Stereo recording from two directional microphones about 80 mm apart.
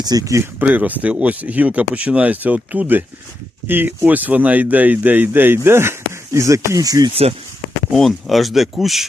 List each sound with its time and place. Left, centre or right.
0.0 s speech: right
0.6 s speech: centre; by 7.1 s right
7.9 s speech: centre